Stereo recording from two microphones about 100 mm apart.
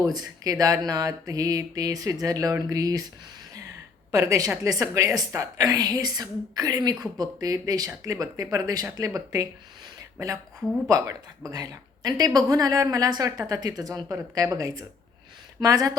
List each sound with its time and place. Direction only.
0.0 s a woman's voice: 40° right (ahead or behind)
4.1 s a woman's voice: 30° right (ahead or behind)